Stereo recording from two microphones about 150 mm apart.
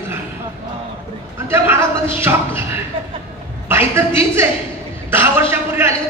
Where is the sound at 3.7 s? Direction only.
15° right (ahead or behind).